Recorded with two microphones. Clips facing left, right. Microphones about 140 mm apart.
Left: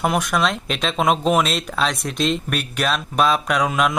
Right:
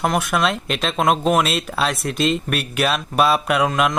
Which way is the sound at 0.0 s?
Centre (ahead or behind).